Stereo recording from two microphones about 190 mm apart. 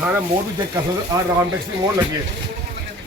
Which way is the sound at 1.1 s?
20° right (ahead or behind).